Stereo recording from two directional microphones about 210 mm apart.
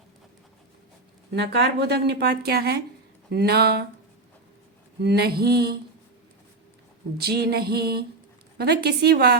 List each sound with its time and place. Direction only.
1.3 s speech: 55° right (ahead or behind)
4.9 s speech: 50° right (ahead or behind)
7.2 s speech: 50° right (ahead or behind)